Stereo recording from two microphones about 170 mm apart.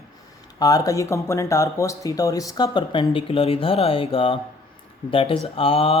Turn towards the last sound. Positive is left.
turn(degrees=35)  # may be behind; listen again after turning